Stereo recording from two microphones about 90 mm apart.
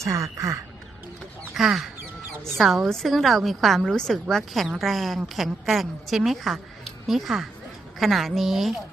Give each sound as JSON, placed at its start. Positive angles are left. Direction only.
{"t": 0.0, "sound": "speech", "side_deg": -35}
{"t": 1.5, "sound": "a woman's voice", "side_deg": -5}